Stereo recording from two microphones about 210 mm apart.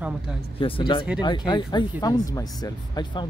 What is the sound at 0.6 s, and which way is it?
Speech, 25° left (ahead or behind).